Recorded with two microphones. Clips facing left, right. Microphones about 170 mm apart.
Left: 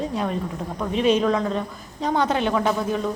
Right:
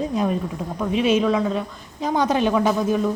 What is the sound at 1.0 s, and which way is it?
A woman's voice, 5° right (ahead or behind).